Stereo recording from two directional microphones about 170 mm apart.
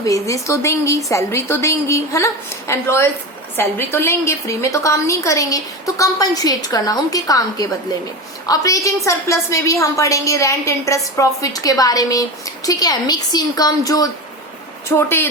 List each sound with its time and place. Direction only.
0.0 s a woman's voice: 20° left (ahead or behind)